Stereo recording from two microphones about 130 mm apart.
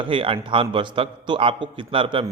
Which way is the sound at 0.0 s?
40° right (ahead or behind).